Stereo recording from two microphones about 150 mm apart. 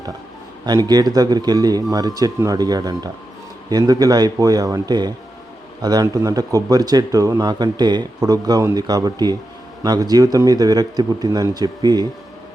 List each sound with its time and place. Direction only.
0.6 s speech: 25° right (ahead or behind)